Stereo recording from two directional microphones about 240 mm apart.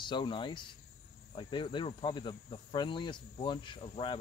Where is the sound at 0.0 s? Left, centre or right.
Centre.